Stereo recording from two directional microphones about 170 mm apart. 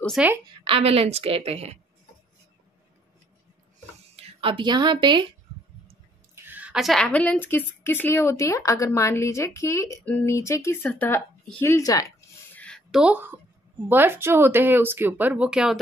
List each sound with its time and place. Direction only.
0.0 s a woman's voice: centre (ahead or behind)
0.5 s a woman's voice: 35° right (ahead or behind)
4.2 s speech: 30° right (ahead or behind)
6.3 s a woman's voice: 10° right (ahead or behind); by 12.1 s 20° left (ahead or behind)
12.5 s a sound: 5° left (ahead or behind); by 13.4 s 10° right (ahead or behind)
13.8 s speech: 10° right (ahead or behind)